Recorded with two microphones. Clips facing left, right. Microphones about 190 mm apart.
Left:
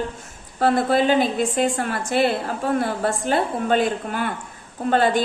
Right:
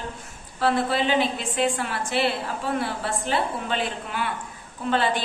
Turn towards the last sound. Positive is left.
turn(degrees=45)  # may be behind; listen again after turning